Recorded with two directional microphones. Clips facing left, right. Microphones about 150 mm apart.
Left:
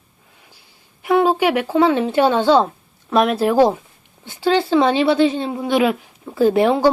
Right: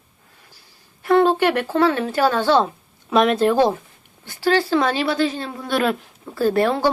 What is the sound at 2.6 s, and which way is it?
Speech, centre (ahead or behind).